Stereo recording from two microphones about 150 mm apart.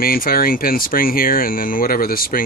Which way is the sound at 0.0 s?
75° left (ahead or behind).